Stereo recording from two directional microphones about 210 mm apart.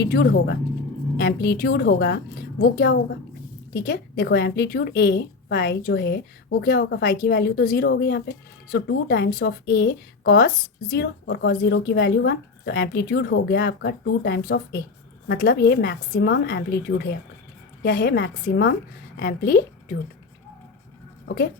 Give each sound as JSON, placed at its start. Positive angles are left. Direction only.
{"t": 0.0, "sound": "a woman's voice", "side_deg": 50}
{"t": 17.8, "sound": "a woman's voice", "side_deg": 50}
{"t": 21.2, "sound": "speech", "side_deg": 45}